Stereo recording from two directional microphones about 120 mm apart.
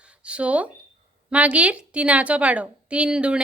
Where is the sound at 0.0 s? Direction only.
10° right (ahead or behind).